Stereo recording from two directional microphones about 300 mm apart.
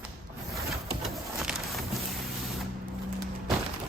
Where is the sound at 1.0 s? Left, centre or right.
Centre.